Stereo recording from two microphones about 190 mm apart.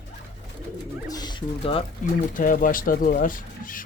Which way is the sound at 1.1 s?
20° left (ahead or behind).